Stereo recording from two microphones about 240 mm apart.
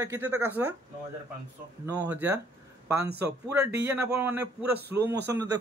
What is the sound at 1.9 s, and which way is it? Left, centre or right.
Speech, centre.